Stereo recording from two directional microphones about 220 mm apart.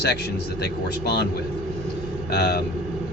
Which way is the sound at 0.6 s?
50° left (ahead or behind).